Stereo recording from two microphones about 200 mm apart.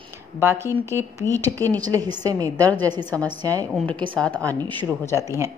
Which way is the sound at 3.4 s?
15° right (ahead or behind).